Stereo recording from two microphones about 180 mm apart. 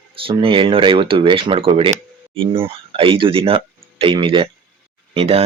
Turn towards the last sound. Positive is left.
turn(degrees=-35)  # may be behind; listen again after turning